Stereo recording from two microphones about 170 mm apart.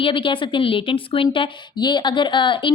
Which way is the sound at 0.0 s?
30° left (ahead or behind).